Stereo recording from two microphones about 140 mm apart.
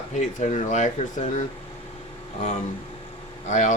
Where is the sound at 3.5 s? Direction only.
60° left (ahead or behind).